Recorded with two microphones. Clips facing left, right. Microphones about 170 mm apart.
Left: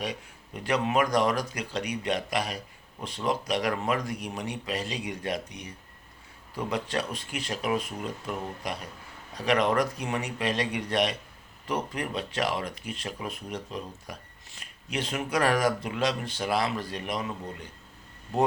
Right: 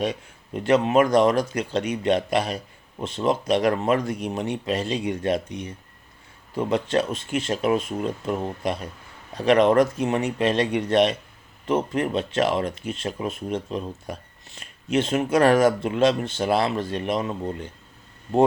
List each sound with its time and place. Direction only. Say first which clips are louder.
0.6 s speech: right 7 dB; 25° right (ahead or behind)